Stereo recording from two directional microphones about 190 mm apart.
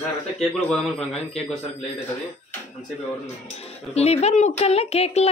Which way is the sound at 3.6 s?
35° left (ahead or behind).